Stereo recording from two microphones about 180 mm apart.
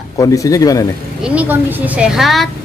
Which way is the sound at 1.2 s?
5° right (ahead or behind).